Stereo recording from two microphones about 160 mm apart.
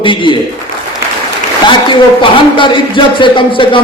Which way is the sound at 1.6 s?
30° left (ahead or behind).